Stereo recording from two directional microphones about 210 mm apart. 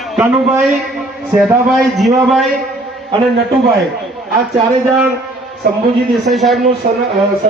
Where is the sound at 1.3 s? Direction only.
Centre (ahead or behind).